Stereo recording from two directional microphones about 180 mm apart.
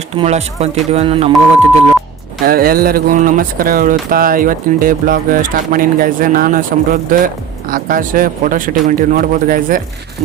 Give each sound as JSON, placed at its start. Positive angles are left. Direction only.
{"t": 0.2, "sound": "speech", "side_deg": -35}
{"t": 2.5, "sound": "speech", "side_deg": -55}